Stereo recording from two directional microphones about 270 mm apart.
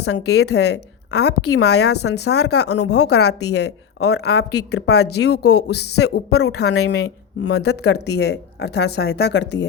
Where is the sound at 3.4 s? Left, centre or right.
Left.